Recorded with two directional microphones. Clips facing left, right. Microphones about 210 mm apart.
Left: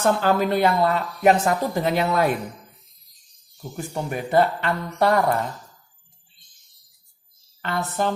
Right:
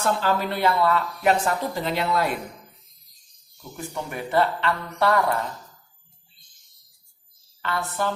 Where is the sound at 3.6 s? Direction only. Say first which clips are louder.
Left 3 dB; 40° left (ahead or behind).